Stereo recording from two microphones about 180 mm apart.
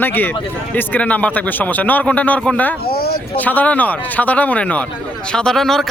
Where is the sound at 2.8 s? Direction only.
55° left (ahead or behind).